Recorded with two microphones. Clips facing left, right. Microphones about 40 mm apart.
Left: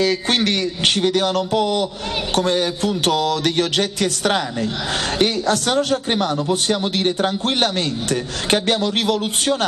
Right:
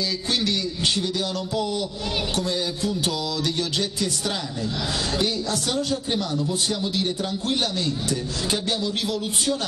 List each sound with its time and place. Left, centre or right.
0.0 s speech: left